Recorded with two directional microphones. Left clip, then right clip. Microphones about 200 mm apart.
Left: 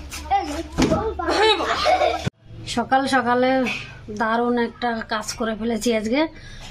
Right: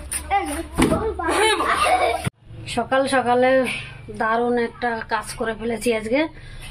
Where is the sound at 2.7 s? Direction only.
15° left (ahead or behind).